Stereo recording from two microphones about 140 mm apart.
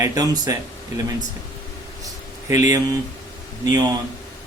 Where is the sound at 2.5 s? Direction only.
25° right (ahead or behind).